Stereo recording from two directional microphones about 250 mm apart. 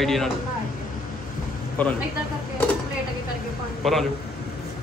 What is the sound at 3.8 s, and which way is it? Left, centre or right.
Speech, centre.